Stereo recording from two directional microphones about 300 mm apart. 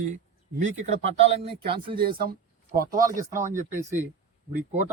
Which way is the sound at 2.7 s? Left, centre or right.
Right.